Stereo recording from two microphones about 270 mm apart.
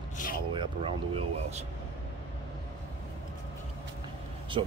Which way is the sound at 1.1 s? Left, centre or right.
Right.